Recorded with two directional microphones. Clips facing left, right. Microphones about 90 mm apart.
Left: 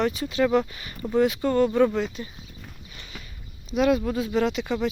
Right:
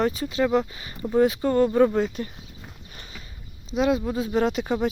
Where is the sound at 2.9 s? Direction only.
40° right (ahead or behind).